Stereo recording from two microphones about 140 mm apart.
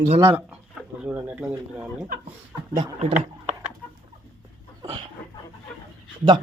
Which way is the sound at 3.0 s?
55° right (ahead or behind).